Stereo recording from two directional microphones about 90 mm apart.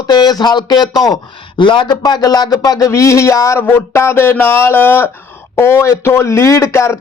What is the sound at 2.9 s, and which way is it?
Speech, 35° left (ahead or behind).